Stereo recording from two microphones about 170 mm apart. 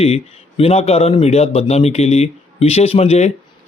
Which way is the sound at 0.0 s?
35° left (ahead or behind).